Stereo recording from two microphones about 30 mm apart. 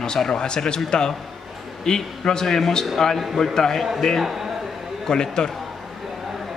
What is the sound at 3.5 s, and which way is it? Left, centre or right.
Speech, centre.